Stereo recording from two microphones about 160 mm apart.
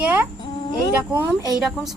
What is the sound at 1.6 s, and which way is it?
Speech, centre (ahead or behind).